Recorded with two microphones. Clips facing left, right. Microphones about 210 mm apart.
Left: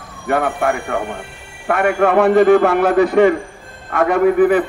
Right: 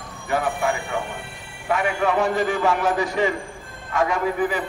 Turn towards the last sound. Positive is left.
turn(degrees=60)  # may be behind; listen again after turning